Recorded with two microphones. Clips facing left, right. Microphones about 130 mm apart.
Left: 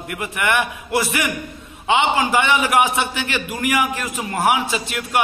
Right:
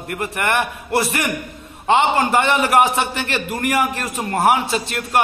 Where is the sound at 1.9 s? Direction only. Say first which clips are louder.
Right 2 dB; 50° right (ahead or behind).